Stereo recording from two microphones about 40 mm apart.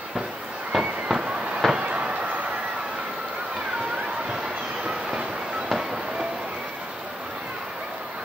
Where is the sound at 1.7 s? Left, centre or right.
Right.